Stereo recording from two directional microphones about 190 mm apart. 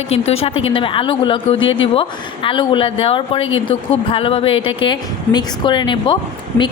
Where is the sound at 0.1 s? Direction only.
30° left (ahead or behind).